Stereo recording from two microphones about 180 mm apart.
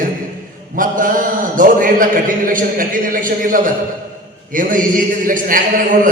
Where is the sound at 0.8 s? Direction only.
50° right (ahead or behind).